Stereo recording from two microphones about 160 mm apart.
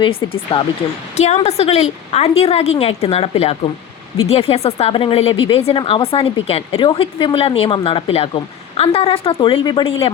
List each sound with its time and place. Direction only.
0.0 s speech: 30° left (ahead or behind)
1.1 s a woman's voice: 45° left (ahead or behind)